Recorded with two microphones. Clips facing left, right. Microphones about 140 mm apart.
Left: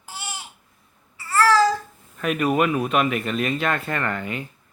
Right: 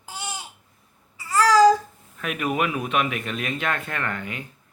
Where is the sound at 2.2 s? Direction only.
5° right (ahead or behind).